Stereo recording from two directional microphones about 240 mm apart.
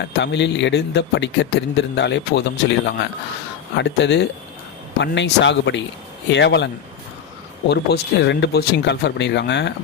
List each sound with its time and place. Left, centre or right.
0.2 s speech: left
7.7 s speech: left